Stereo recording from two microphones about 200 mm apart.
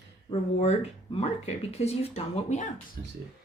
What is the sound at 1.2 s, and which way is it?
Speech, 30° left (ahead or behind).